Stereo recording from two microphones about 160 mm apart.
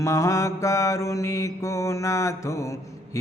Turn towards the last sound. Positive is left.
turn(degrees=20)  # may be behind; listen again after turning